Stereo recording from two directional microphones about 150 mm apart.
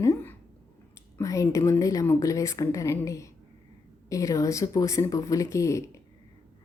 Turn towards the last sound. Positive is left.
turn(degrees=20)  # may be behind; listen again after turning